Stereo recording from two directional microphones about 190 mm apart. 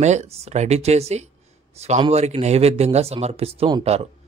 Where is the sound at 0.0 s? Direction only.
35° right (ahead or behind).